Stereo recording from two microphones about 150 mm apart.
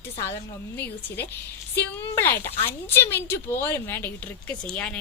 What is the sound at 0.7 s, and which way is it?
A woman's voice, 15° left (ahead or behind).